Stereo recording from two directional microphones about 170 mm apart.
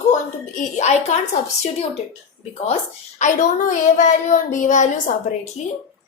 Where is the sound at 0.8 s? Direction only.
40° left (ahead or behind).